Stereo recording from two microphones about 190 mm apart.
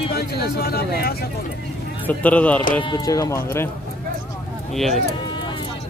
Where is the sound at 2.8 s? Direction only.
20° left (ahead or behind).